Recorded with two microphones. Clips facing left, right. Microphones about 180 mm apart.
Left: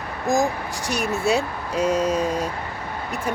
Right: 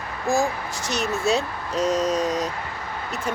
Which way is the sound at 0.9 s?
15° left (ahead or behind).